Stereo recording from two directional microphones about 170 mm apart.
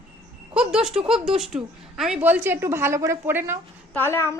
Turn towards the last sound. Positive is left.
turn(degrees=15)  # may be behind; listen again after turning